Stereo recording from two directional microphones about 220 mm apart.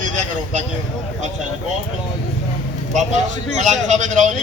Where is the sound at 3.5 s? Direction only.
35° right (ahead or behind).